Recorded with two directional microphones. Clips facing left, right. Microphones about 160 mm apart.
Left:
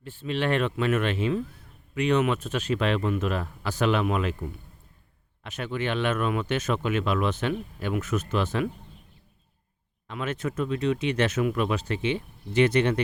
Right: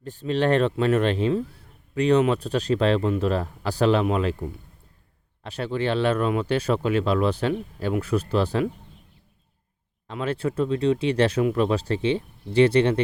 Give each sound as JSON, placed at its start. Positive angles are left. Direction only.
{"t": 0.0, "sound": "speech", "side_deg": -40}
{"t": 10.1, "sound": "speech", "side_deg": -30}